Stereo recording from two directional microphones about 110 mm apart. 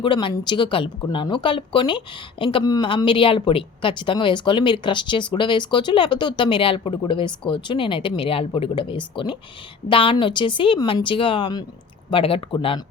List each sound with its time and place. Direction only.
0.0 s a woman's voice: 50° left (ahead or behind)
2.6 s speech: 35° left (ahead or behind)
2.9 s a woman's voice: 50° left (ahead or behind)